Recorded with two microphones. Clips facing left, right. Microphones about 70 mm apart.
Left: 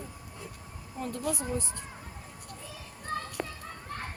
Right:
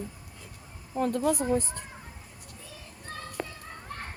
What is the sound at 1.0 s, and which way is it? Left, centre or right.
Speech, right.